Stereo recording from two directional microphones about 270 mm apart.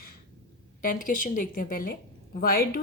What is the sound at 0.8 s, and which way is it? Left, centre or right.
A woman's voice, left.